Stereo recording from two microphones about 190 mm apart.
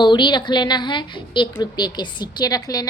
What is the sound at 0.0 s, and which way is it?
A woman's voice, 25° left (ahead or behind).